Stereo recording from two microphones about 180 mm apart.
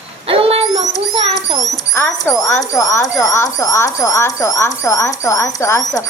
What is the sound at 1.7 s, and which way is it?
Speech, 20° left (ahead or behind).